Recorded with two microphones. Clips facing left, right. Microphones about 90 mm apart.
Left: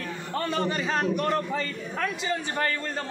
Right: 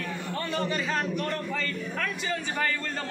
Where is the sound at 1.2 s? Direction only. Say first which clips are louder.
Left 4 dB; 20° left (ahead or behind).